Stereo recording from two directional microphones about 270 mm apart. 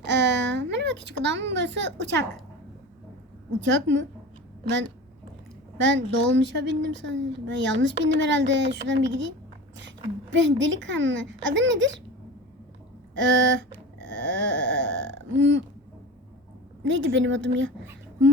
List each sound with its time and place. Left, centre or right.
0.0 s a woman's voice: right
3.6 s a woman's voice: right
5.7 s a woman's voice: right
10.3 s speech: right
13.1 s a sound: right
16.8 s speech: right